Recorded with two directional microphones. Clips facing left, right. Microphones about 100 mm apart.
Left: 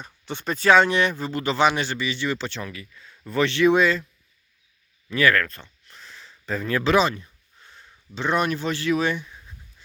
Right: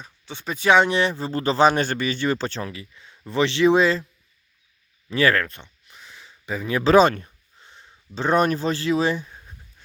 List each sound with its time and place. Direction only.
0.0 s speech: centre (ahead or behind)
0.5 s speech: 15° right (ahead or behind)
5.1 s speech: 30° right (ahead or behind)
5.9 s a sound: 10° right (ahead or behind)
6.8 s speech: 40° right (ahead or behind)
7.6 s a sound: 20° right (ahead or behind)
8.1 s speech: 40° right (ahead or behind)